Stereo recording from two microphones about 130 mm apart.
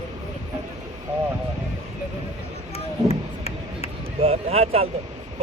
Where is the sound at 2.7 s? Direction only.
50° left (ahead or behind).